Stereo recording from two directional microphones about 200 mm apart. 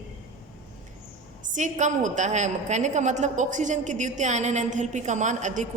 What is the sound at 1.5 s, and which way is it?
A woman's voice, 40° right (ahead or behind).